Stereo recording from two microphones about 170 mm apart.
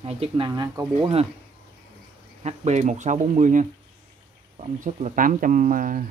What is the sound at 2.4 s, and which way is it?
Speech, 40° right (ahead or behind).